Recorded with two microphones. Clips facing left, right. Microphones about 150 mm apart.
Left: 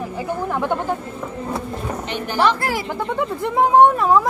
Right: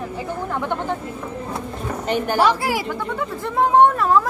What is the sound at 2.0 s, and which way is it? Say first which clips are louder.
Speech: right 4 dB; 45° right (ahead or behind).